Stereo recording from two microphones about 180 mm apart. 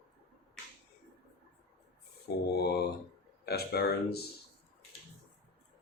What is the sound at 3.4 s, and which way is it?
Speech, 60° left (ahead or behind).